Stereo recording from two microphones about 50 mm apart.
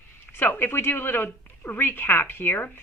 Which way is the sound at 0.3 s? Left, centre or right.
Left.